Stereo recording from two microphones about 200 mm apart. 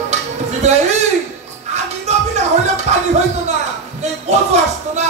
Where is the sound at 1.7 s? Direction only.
35° right (ahead or behind).